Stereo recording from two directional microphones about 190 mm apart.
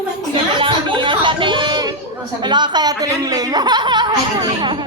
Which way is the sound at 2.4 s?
25° right (ahead or behind).